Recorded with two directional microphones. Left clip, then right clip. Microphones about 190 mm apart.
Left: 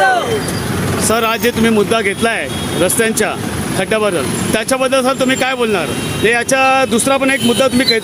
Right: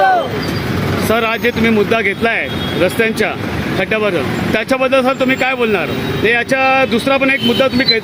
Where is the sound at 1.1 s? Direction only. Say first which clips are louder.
Even; 10° left (ahead or behind).